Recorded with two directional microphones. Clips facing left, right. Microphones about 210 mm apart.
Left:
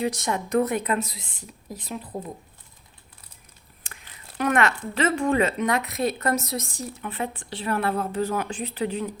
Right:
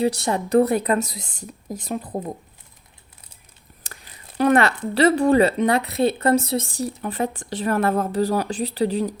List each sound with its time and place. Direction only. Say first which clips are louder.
0.0 s speech: right 5 dB; 35° right (ahead or behind)
1.2 s a woman's voice: right 6 dB; centre (ahead or behind)
1.7 s speech: right 6 dB; 45° right (ahead or behind)
3.9 s a sound: right 4 dB; 40° right (ahead or behind)
4.4 s speech: right 5 dB; 35° right (ahead or behind)